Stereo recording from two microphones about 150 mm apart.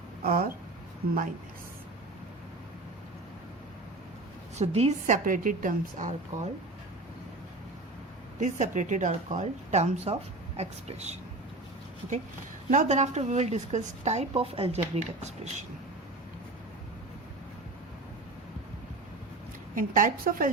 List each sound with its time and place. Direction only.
0.2 s a woman's voice: 80° right
4.5 s a woman's voice: 45° right (ahead or behind)
8.4 s a woman's voice: 55° right (ahead or behind)
12.7 s a woman's voice: 50° right (ahead or behind)
19.7 s a woman's voice: 60° right (ahead or behind)